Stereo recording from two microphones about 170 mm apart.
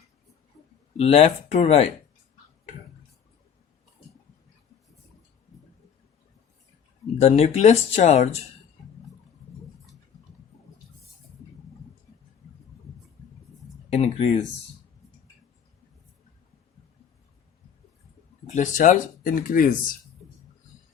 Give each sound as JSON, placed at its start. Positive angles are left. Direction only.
{"t": 0.9, "sound": "speech", "side_deg": 35}
{"t": 7.2, "sound": "speech", "side_deg": 40}
{"t": 13.9, "sound": "speech", "side_deg": 35}
{"t": 18.4, "sound": "speech", "side_deg": 45}